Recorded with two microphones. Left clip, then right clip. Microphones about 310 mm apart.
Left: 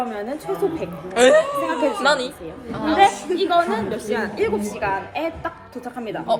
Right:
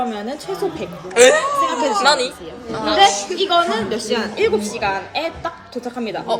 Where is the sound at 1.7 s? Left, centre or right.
Centre.